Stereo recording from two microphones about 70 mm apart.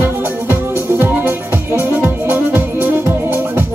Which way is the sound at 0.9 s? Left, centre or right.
Right.